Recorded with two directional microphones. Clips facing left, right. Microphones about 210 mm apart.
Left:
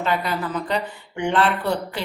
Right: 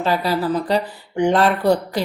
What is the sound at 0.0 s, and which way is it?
Speech, 35° right (ahead or behind).